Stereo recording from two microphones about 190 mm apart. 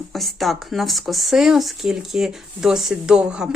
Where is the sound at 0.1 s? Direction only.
Centre (ahead or behind).